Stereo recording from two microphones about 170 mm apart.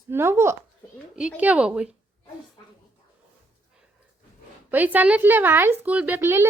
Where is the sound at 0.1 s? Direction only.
15° right (ahead or behind).